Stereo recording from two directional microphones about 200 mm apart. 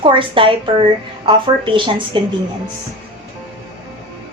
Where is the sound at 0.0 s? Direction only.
25° right (ahead or behind).